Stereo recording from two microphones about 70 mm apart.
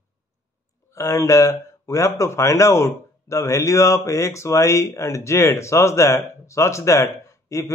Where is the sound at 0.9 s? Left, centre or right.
Left.